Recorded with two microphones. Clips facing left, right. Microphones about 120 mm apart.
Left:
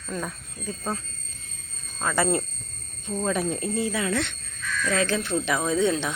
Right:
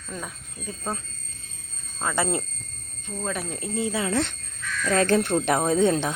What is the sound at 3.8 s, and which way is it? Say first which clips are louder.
Speech: right 4 dB; 25° right (ahead or behind).